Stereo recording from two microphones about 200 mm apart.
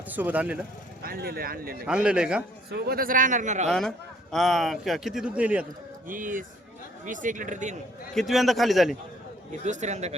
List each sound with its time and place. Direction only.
0.1 s speech: 10° right (ahead or behind)
1.0 s a man's voice: 50° right (ahead or behind)
1.9 s speech: 5° right (ahead or behind)
2.6 s a man's voice: 55° right (ahead or behind); by 3.7 s 40° right (ahead or behind)
3.7 s speech: centre (ahead or behind)
6.1 s speech: 40° right (ahead or behind)
8.1 s speech: centre (ahead or behind)
9.5 s speech: 35° right (ahead or behind)